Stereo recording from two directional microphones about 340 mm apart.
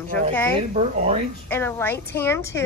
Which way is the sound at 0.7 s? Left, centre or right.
Centre.